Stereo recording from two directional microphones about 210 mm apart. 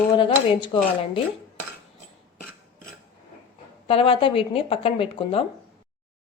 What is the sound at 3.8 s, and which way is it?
Speech, 25° left (ahead or behind).